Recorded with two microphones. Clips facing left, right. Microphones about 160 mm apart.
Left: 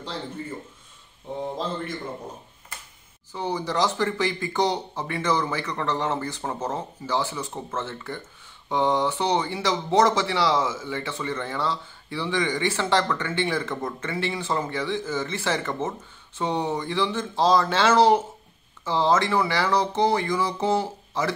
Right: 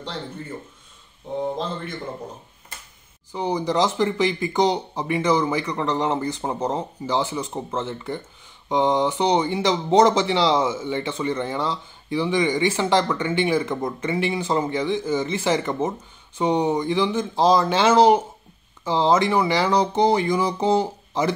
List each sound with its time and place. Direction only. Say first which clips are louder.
3.3 s speech: right 4 dB; 15° right (ahead or behind)